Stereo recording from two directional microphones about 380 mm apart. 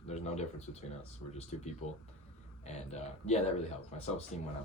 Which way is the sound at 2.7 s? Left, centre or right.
Centre.